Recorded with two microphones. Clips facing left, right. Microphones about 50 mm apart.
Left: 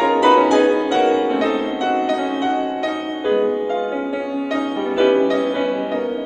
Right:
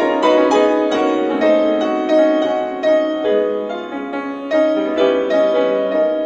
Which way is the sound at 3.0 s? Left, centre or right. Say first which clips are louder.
Right 3 dB; left.